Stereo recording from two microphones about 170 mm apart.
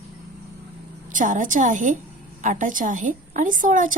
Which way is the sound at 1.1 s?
50° right (ahead or behind).